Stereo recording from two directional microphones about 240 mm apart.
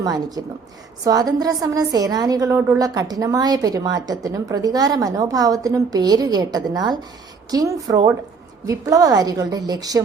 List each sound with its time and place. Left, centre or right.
0.0 s a woman's voice: centre